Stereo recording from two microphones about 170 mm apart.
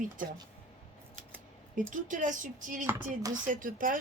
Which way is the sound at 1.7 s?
50° right (ahead or behind).